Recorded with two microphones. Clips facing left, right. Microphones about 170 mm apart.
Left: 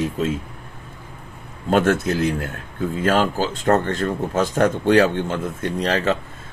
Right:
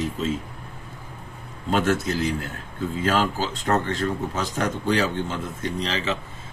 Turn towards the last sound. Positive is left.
turn(degrees=55)  # may be behind; listen again after turning